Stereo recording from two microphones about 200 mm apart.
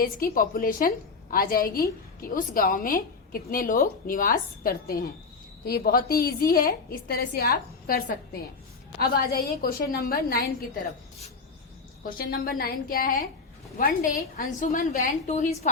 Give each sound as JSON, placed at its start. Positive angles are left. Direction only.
{"t": 0.0, "sound": "a woman's voice", "side_deg": 45}
{"t": 12.0, "sound": "a woman's voice", "side_deg": 50}